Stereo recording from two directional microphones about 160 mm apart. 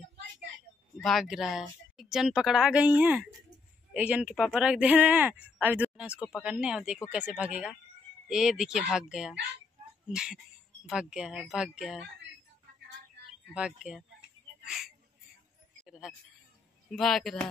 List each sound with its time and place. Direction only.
1.0 s speech: centre (ahead or behind)
13.5 s speech: 5° right (ahead or behind)
15.8 s a sound: 5° right (ahead or behind)
16.9 s speech: centre (ahead or behind)